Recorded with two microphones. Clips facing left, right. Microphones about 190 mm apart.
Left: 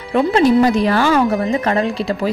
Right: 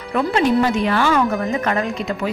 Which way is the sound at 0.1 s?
30° left (ahead or behind).